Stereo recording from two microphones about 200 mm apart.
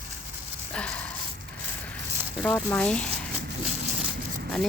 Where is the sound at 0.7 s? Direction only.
5° left (ahead or behind).